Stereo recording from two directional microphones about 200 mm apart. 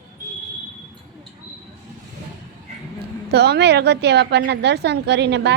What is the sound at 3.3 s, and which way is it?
A woman's voice, 55° right (ahead or behind).